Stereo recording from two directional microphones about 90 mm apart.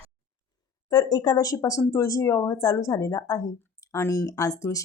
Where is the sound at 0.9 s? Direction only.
50° left (ahead or behind).